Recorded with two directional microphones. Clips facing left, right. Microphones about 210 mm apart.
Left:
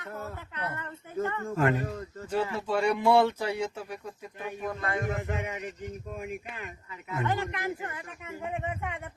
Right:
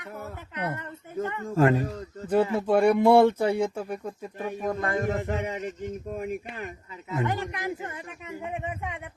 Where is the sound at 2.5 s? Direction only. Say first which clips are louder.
Right 7 dB; 55° right (ahead or behind); by 5.0 s 40° right (ahead or behind).